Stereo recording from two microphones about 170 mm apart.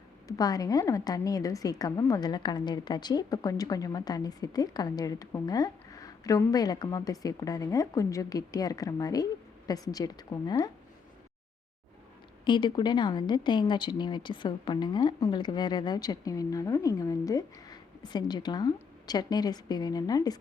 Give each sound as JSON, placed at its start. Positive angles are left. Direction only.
{"t": 0.3, "sound": "a woman's voice", "side_deg": 20}
{"t": 12.5, "sound": "a woman's voice", "side_deg": 25}